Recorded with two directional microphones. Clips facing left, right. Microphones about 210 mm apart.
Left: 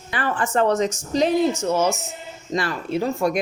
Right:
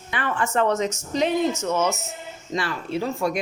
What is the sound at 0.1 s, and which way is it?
A woman's voice, 35° left (ahead or behind).